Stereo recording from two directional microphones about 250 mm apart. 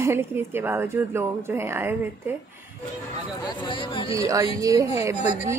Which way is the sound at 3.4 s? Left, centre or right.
Centre.